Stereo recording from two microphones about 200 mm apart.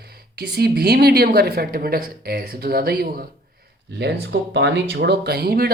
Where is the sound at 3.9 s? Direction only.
55° right (ahead or behind).